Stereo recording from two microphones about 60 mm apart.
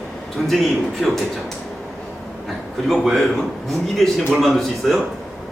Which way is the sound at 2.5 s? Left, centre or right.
Centre.